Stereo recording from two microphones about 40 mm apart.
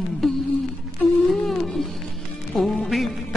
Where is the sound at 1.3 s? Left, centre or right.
Centre.